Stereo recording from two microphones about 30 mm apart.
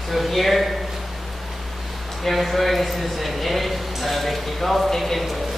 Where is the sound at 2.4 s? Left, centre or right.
Centre.